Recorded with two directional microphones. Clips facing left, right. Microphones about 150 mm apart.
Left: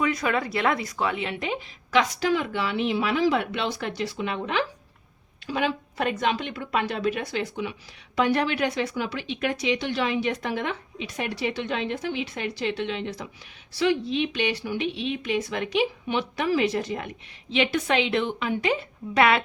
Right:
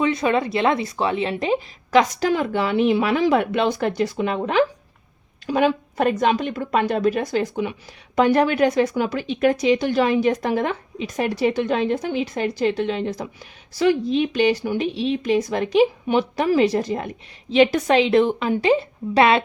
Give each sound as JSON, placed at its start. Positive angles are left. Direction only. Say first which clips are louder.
{"t": 0.0, "sound": "a woman's voice", "louder": "right 5 dB", "side_deg": -25}